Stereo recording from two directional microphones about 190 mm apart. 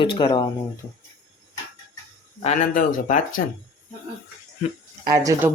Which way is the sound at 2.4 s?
40° left (ahead or behind).